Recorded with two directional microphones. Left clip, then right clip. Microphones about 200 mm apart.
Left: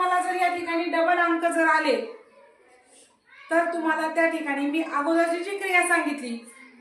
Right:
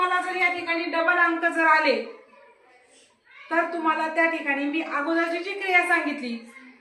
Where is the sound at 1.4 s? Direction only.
25° left (ahead or behind).